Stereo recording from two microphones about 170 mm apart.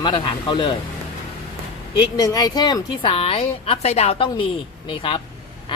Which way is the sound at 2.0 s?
20° left (ahead or behind).